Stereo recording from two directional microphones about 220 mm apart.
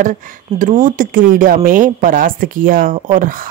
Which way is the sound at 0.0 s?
35° right (ahead or behind).